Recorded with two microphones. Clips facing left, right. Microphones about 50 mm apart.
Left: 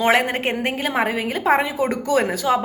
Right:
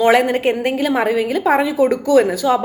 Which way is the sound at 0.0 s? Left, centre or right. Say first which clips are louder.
Right 5 dB; left.